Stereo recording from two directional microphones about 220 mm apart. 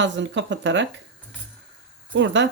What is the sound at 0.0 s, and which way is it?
Speech, 55° right (ahead or behind).